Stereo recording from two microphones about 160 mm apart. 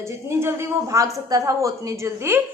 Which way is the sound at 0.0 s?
15° right (ahead or behind).